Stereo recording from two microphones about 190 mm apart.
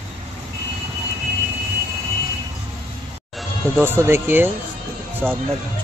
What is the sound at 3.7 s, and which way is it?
Speech, 10° right (ahead or behind).